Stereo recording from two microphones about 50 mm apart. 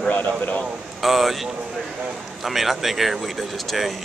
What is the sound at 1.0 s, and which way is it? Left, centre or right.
Speech, centre.